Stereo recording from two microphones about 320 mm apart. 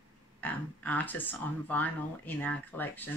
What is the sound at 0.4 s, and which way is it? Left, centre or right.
Speech, centre.